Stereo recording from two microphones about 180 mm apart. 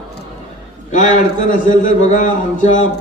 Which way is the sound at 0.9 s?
45° left (ahead or behind).